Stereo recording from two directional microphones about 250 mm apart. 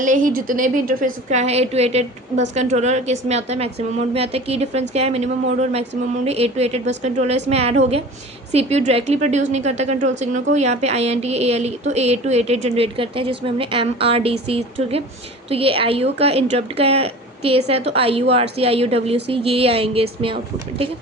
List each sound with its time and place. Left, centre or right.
0.0 s a woman's voice: right